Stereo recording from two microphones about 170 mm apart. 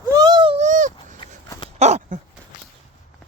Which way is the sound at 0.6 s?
45° right (ahead or behind).